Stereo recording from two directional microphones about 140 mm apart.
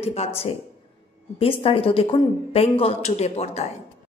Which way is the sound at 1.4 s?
40° left (ahead or behind).